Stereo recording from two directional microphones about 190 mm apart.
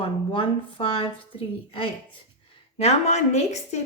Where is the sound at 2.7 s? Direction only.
35° left (ahead or behind).